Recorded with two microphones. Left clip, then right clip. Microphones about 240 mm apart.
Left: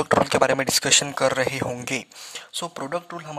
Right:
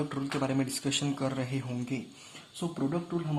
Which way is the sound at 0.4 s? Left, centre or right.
Left.